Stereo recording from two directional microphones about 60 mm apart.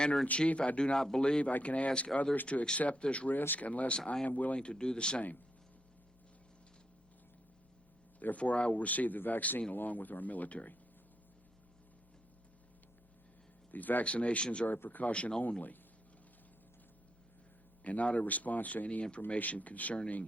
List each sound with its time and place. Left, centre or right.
0.3 s speech: left
4.3 s speech: left
8.2 s speech: left
13.7 s speech: left
14.7 s speech: left
17.8 s speech: left